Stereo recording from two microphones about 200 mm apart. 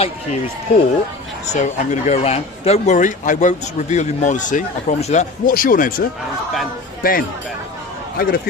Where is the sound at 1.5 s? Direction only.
35° left (ahead or behind).